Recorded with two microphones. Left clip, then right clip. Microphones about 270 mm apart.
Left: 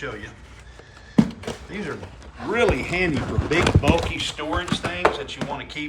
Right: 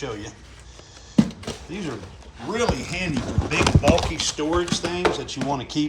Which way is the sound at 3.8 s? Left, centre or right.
Centre.